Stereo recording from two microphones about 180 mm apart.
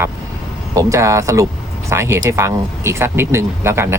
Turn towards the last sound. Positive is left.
turn(degrees=-15)  # may be behind; listen again after turning